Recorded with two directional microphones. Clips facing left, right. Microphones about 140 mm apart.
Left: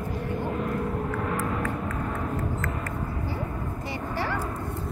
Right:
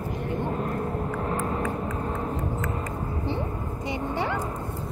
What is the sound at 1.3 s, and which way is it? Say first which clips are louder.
Hum: right 1 dB; 30° right (ahead or behind).